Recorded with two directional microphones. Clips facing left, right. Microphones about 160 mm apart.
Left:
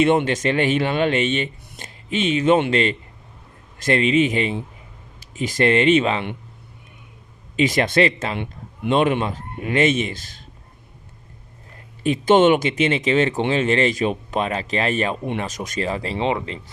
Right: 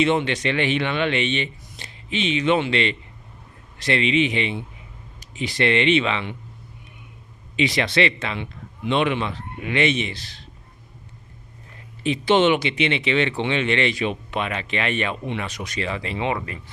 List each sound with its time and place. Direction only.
0.0 s speech: 50° left (ahead or behind)
7.5 s speech: 45° left (ahead or behind)
12.0 s speech: 45° left (ahead or behind)